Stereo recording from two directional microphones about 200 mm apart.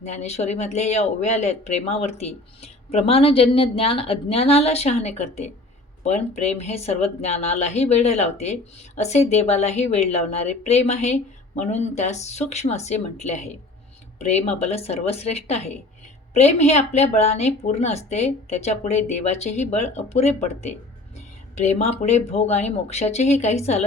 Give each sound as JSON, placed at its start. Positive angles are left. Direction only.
{"t": 0.0, "sound": "speech", "side_deg": 35}